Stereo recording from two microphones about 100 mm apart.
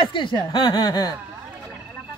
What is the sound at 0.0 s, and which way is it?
Speech, 55° left (ahead or behind).